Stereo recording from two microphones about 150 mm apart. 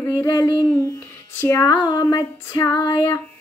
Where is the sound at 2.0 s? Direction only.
25° left (ahead or behind).